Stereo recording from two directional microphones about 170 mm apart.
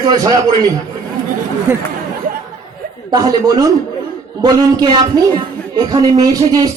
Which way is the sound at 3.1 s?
20° right (ahead or behind).